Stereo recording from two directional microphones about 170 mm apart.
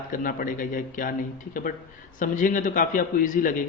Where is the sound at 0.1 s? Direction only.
55° left (ahead or behind).